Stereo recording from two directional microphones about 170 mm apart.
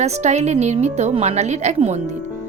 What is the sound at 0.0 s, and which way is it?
A woman's voice, 40° right (ahead or behind).